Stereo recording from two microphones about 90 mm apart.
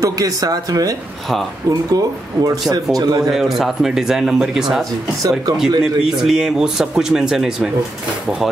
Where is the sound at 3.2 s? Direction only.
5° right (ahead or behind).